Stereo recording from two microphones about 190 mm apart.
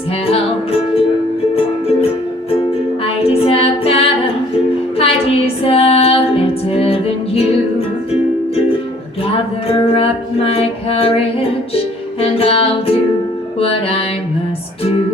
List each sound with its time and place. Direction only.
0.3 s music: 30° left (ahead or behind)
3.0 s a capella: 30° left (ahead or behind)
4.9 s music: 30° left (ahead or behind)
9.2 s music: 30° left (ahead or behind)